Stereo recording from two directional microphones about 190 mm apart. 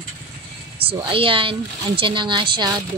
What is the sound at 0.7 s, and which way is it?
Speech, 30° right (ahead or behind).